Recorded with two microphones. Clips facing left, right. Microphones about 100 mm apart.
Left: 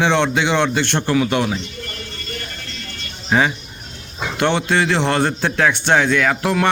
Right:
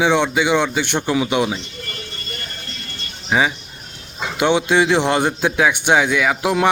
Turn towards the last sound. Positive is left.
turn(degrees=-15)  # may be behind; listen again after turning